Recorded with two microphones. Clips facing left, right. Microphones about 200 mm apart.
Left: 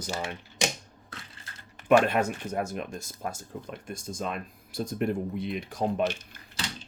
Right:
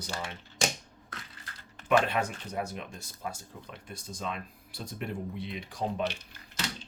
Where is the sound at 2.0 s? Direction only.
50° left (ahead or behind).